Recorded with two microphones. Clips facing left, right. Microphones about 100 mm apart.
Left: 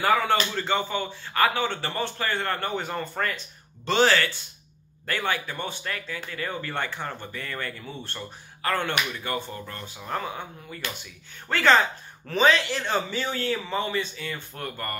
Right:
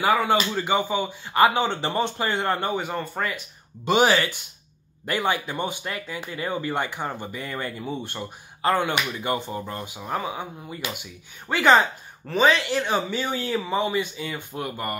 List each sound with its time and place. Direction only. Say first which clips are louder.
0.3 s speech: right 2 dB; 10° right (ahead or behind)
2.7 s speech: right 2 dB; 5° right (ahead or behind)